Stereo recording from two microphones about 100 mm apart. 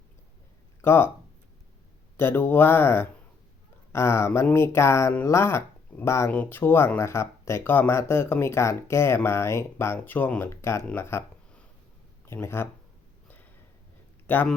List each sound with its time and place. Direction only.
0.8 s speech: 25° left (ahead or behind)
2.1 s speech: 25° left (ahead or behind)
6.3 s speech: 15° left (ahead or behind)
12.2 s speech: 25° left (ahead or behind)
13.2 s a sound: 15° left (ahead or behind)
14.3 s speech: 20° left (ahead or behind)